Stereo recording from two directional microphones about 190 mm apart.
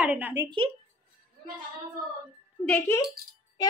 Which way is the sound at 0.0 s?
10° right (ahead or behind).